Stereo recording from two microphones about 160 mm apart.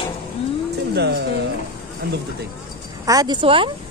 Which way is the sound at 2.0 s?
75° right (ahead or behind).